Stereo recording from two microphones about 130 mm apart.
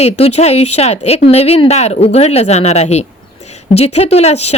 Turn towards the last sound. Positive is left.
turn(degrees=55)  # may be behind; listen again after turning